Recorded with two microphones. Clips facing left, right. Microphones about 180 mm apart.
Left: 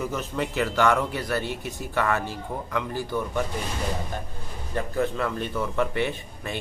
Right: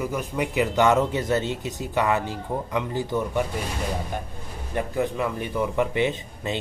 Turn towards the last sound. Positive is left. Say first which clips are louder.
# right 4 dB
turn(degrees=-20)  # may be behind; listen again after turning